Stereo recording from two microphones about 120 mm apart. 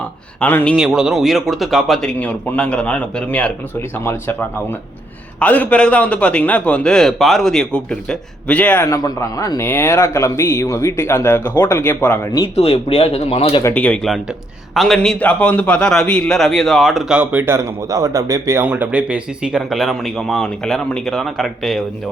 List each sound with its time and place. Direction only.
0.3 s a man's voice: 10° left (ahead or behind)
0.8 s a man's voice: 5° right (ahead or behind); by 8.8 s 10° left (ahead or behind)
8.8 s speech: 30° left (ahead or behind)
12.5 s speech: 50° left (ahead or behind)
13.7 s a man's voice: 15° left (ahead or behind)
14.8 s speech: 5° left (ahead or behind)
17.5 s speech: 25° right (ahead or behind)
18.6 s speech: 15° right (ahead or behind)